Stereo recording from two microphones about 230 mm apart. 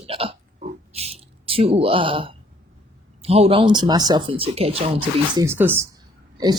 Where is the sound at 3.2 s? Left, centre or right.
Right.